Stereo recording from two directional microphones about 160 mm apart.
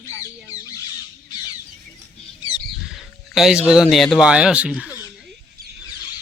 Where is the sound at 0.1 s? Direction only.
20° left (ahead or behind).